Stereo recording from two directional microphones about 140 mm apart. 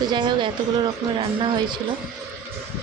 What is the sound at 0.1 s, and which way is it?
Speech, 35° right (ahead or behind).